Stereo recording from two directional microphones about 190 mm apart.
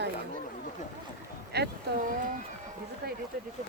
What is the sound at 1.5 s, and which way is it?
Speech, 50° right (ahead or behind).